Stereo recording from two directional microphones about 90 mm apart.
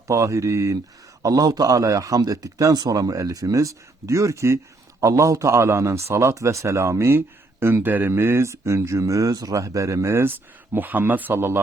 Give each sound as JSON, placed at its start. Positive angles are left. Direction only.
{"t": 0.1, "sound": "a man's voice", "side_deg": -35}